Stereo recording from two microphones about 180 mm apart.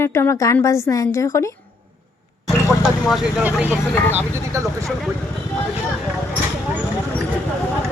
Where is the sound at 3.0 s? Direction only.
Centre (ahead or behind).